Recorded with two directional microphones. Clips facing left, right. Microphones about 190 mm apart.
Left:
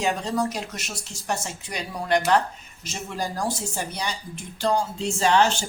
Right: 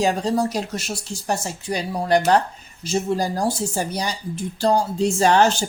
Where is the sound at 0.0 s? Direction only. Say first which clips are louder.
Right 5 dB; 35° right (ahead or behind).